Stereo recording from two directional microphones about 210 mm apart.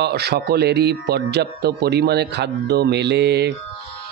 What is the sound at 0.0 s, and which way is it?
Speech, 50° right (ahead or behind).